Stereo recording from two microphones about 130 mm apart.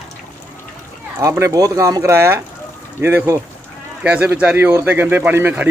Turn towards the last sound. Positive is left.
turn(degrees=-15)  # may be behind; listen again after turning